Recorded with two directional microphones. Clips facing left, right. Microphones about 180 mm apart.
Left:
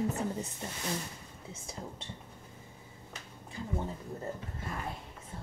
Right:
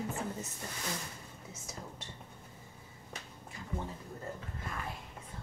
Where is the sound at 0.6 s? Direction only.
20° left (ahead or behind).